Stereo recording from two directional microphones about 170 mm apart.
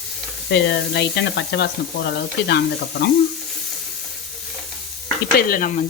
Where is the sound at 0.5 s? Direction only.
85° left.